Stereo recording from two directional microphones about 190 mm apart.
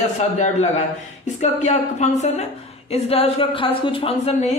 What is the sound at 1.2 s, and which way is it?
Speech, 40° left (ahead or behind).